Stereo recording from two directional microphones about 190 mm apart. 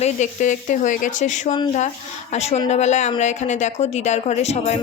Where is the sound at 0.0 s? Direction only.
40° left (ahead or behind).